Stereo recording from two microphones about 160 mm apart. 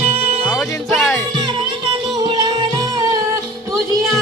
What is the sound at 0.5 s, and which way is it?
Music, centre (ahead or behind).